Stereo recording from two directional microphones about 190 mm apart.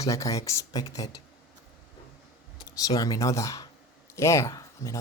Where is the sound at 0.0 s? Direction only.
15° left (ahead or behind).